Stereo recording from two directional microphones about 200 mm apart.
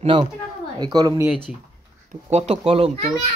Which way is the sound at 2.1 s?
35° right (ahead or behind).